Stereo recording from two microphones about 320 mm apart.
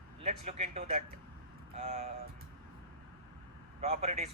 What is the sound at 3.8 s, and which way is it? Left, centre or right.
Speech, right.